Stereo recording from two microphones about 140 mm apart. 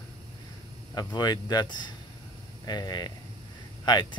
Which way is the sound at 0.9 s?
30° left (ahead or behind).